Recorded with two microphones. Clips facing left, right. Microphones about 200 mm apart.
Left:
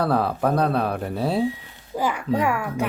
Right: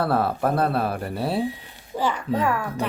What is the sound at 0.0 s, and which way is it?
Speech, centre (ahead or behind).